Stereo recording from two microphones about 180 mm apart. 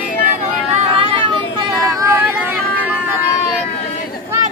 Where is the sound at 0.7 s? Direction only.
30° right (ahead or behind).